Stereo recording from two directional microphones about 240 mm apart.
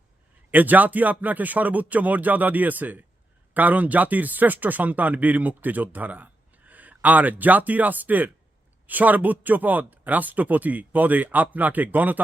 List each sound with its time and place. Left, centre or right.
0.5 s speech: centre